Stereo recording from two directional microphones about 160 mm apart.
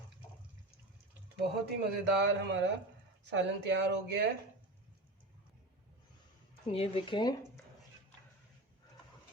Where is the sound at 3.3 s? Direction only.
90° right.